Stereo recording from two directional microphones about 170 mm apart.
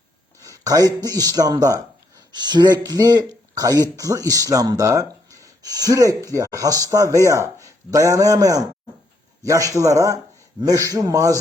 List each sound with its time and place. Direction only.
0.4 s speech: 20° right (ahead or behind)